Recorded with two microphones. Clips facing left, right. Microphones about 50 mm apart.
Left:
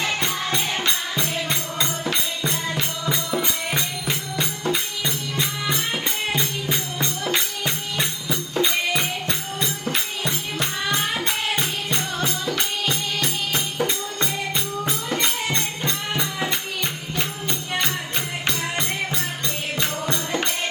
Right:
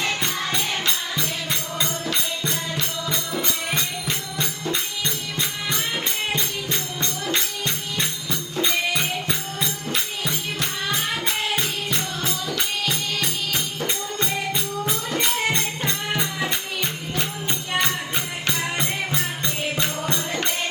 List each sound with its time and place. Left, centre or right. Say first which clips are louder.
0.3 s music: left 1 dB; centre
11.5 s music: even; centre
15.5 s music: even; centre
20.1 s music: left 1 dB; left